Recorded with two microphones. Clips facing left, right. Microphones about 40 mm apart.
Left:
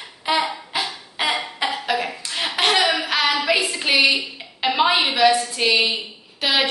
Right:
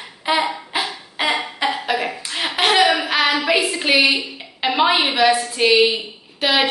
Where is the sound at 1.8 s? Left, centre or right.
Centre.